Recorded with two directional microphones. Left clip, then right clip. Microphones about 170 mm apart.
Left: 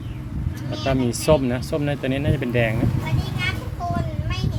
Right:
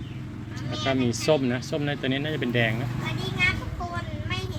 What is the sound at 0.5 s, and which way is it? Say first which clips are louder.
Speech: left 3 dB; 15° left (ahead or behind).